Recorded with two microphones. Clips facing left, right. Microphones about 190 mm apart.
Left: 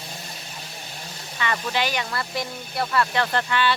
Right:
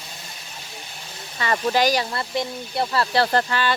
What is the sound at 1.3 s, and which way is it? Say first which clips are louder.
Speech: right 5 dB; 35° right (ahead or behind).